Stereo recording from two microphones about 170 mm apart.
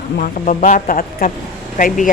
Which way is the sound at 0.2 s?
50° left (ahead or behind).